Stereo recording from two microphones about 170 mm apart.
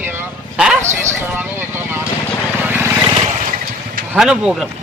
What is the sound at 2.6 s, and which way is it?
Vehicle, 10° right (ahead or behind).